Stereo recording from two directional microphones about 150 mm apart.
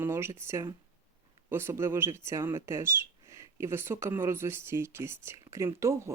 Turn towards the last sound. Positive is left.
turn(degrees=-20)  # may be behind; listen again after turning